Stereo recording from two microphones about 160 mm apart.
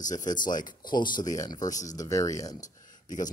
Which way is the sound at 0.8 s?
30° left (ahead or behind).